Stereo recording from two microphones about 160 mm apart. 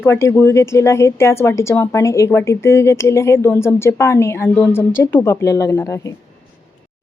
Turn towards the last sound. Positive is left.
turn(degrees=20)  # may be behind; listen again after turning